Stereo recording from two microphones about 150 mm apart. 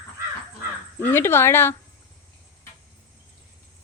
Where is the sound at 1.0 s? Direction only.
15° left (ahead or behind).